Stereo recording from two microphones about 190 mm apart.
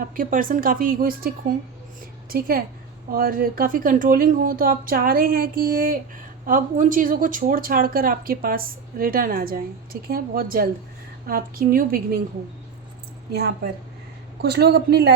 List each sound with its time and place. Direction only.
0.0 s speech: 45° right (ahead or behind)
2.3 s speech: 50° right (ahead or behind)
14.4 s a man's voice: 60° right (ahead or behind)